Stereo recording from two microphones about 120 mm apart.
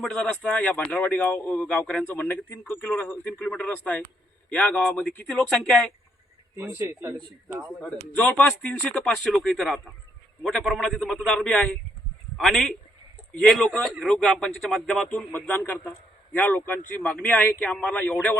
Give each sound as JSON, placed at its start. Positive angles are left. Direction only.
{"t": 0.0, "sound": "a man's voice", "side_deg": 5}
{"t": 6.6, "sound": "speech", "side_deg": -20}
{"t": 7.8, "sound": "a man's voice", "side_deg": 10}
{"t": 15.3, "sound": "a man's voice", "side_deg": 15}